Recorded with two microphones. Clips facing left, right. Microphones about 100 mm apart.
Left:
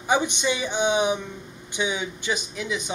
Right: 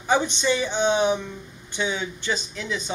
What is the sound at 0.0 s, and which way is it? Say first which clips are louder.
Speech: right 1 dB; 15° left (ahead or behind).